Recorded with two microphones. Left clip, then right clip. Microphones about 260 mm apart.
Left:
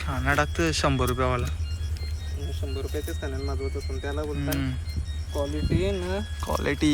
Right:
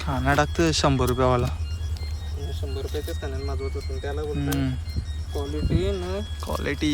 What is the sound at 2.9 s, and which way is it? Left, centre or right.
Speech, centre.